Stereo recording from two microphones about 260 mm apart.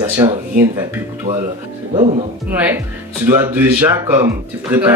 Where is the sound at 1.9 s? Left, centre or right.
Right.